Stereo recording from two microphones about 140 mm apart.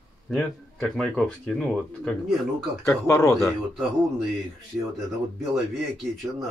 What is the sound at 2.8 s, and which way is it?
Speech, 20° left (ahead or behind).